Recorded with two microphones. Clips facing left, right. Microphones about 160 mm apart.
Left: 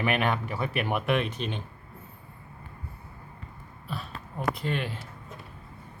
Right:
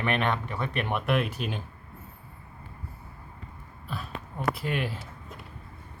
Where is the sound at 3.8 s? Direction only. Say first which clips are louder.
Right 1 dB; centre (ahead or behind).